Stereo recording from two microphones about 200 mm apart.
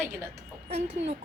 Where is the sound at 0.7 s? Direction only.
35° right (ahead or behind).